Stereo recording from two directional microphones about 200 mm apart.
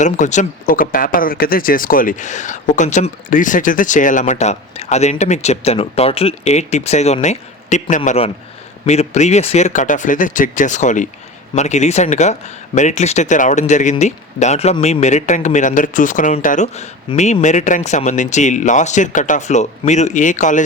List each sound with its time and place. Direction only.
0.0 s speech: 35° left (ahead or behind)